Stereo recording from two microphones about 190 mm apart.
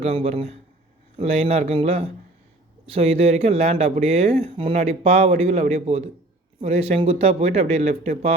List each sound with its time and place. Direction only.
0.0 s speech: 35° right (ahead or behind)